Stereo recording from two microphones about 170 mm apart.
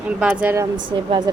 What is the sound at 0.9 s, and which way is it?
Speech, 30° right (ahead or behind).